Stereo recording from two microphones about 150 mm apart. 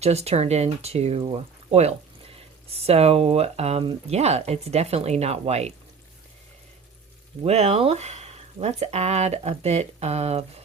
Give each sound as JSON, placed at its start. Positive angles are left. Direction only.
{"t": 0.0, "sound": "speech", "side_deg": -45}
{"t": 7.4, "sound": "speech", "side_deg": -45}